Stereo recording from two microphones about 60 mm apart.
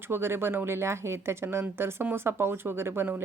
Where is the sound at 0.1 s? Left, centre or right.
Right.